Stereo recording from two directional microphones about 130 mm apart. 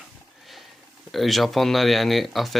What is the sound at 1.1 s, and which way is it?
Speech, centre (ahead or behind).